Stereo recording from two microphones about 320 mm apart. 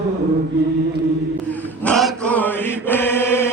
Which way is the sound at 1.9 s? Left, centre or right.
Centre.